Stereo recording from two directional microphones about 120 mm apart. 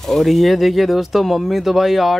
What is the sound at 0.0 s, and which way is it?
Speech, centre (ahead or behind).